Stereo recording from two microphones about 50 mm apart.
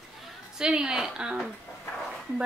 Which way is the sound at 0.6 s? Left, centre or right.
Centre.